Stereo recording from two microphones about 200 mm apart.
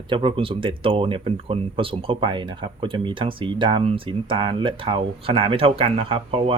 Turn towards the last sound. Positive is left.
turn(degrees=-25)  # may be behind; listen again after turning